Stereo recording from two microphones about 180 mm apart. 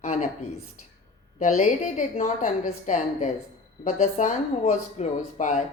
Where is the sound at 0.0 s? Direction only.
40° left (ahead or behind).